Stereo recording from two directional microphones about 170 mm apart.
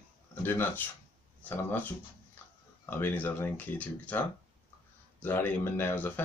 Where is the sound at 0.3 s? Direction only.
10° left (ahead or behind).